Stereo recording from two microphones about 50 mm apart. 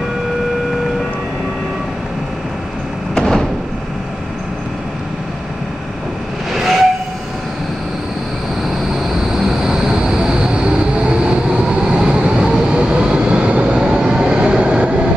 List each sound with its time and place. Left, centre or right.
3.2 s a sound: centre
6.5 s train: centre
9.1 s vehicle: centre